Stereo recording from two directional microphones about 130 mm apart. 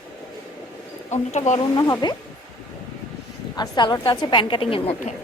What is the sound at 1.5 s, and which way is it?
Speech, 30° left (ahead or behind).